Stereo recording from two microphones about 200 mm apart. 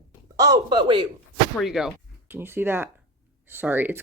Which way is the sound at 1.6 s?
Centre (ahead or behind).